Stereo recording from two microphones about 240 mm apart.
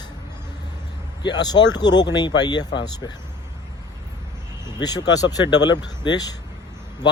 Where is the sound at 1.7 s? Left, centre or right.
Centre.